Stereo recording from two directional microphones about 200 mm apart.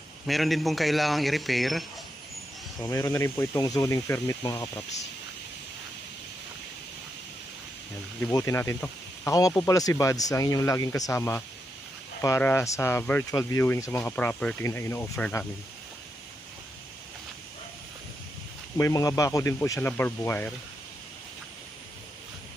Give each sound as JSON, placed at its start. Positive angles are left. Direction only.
{"t": 0.3, "sound": "speech", "side_deg": 0}
{"t": 2.8, "sound": "speech", "side_deg": 15}
{"t": 8.2, "sound": "speech", "side_deg": 15}
{"t": 18.8, "sound": "speech", "side_deg": 15}